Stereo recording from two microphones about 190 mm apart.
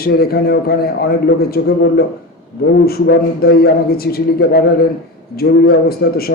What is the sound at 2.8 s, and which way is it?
A man's voice, 55° left (ahead or behind).